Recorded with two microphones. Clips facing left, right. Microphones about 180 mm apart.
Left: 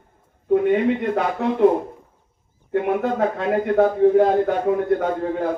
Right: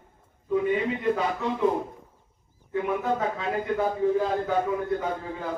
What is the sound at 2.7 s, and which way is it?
A man's voice, 65° left (ahead or behind).